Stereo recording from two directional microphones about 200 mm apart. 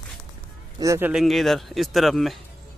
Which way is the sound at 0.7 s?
15° right (ahead or behind).